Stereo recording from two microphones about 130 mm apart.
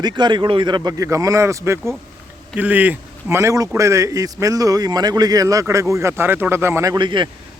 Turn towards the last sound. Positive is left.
turn(degrees=-35)  # may be behind; listen again after turning